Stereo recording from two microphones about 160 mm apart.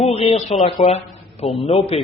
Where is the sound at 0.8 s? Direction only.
40° left (ahead or behind).